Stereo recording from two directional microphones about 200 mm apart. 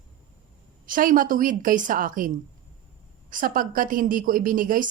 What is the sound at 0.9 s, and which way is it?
A woman's voice, 45° right (ahead or behind).